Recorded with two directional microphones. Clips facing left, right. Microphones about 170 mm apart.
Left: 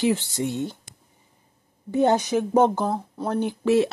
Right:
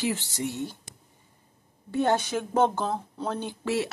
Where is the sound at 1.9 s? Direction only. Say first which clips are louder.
Left 5 dB; 15° left (ahead or behind).